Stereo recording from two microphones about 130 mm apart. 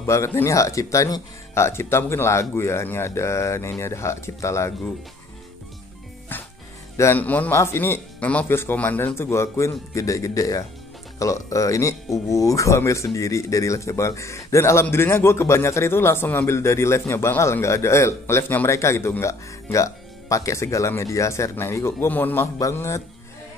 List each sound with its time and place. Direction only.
0.0 s speech: 20° left (ahead or behind)
7.0 s speech: 15° left (ahead or behind)